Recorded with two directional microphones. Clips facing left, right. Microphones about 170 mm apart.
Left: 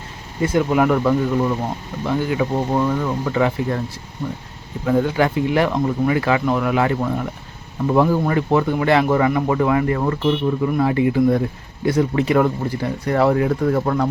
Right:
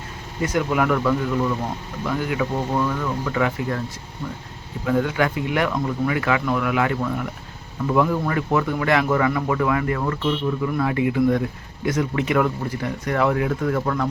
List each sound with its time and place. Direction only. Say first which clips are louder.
0.4 s speech: left 4 dB; 25° left (ahead or behind)
4.9 s speech: left 3 dB; 30° left (ahead or behind)